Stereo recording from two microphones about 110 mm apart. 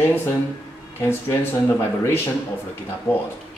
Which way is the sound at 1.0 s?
20° left (ahead or behind).